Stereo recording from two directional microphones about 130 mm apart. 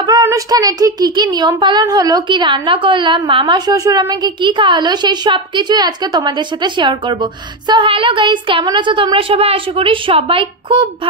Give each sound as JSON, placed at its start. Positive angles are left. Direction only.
{"t": 0.0, "sound": "a woman's voice", "side_deg": -25}